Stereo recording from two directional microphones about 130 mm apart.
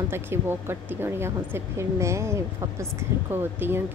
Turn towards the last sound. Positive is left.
turn(degrees=-15)  # may be behind; listen again after turning